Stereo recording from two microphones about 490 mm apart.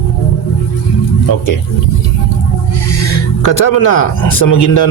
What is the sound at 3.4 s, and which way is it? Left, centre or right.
Speech, left.